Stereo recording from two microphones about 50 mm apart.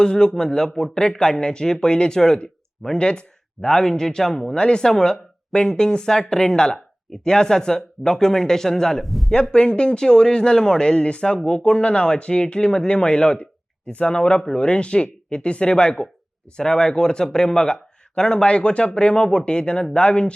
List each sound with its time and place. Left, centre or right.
0.0 s speech: centre
9.3 s speech: centre